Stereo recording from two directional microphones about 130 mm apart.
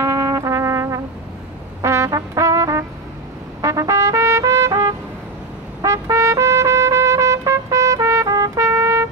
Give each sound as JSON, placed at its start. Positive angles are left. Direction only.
{"t": 0.0, "sound": "music", "side_deg": -25}
{"t": 1.8, "sound": "brass instrument", "side_deg": -25}
{"t": 3.6, "sound": "trumpet", "side_deg": -25}